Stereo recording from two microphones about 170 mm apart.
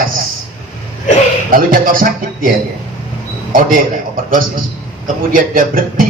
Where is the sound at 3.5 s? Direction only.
55° right (ahead or behind).